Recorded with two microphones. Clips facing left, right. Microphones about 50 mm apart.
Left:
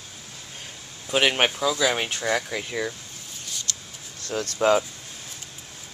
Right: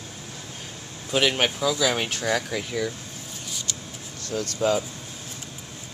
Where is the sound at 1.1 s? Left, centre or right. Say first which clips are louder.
Left 1 dB; left.